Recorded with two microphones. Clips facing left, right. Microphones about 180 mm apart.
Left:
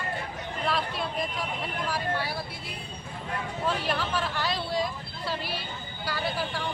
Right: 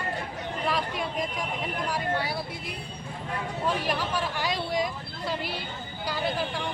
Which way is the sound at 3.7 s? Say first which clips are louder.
Right 1 dB; 15° right (ahead or behind).